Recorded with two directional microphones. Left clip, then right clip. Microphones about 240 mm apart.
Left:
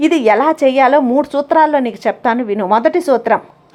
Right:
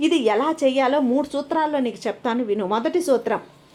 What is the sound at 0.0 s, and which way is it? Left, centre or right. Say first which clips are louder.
Speech: left 8 dB; left.